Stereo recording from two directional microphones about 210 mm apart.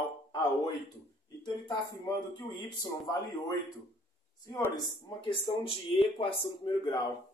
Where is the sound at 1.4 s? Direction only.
20° left (ahead or behind).